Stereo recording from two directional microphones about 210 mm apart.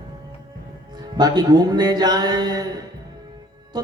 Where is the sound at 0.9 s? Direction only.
20° right (ahead or behind).